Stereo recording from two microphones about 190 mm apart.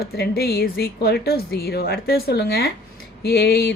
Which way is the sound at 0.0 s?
55° left (ahead or behind).